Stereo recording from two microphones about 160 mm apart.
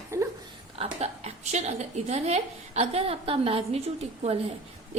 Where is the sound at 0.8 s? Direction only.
40° right (ahead or behind).